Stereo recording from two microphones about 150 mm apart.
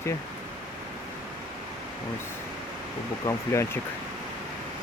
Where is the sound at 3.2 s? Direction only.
20° left (ahead or behind).